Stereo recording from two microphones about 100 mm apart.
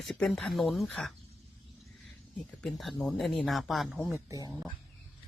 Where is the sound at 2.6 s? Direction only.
Centre (ahead or behind).